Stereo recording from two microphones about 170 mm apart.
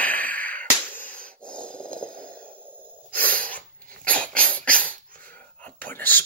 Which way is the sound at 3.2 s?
10° left (ahead or behind).